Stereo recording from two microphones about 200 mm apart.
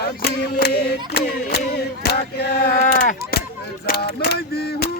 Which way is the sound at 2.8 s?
40° left (ahead or behind).